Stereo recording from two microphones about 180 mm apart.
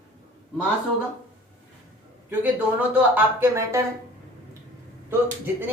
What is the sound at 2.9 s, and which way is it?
Speech, 10° right (ahead or behind).